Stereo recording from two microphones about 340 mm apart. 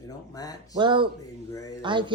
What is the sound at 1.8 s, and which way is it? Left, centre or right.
Speech, centre.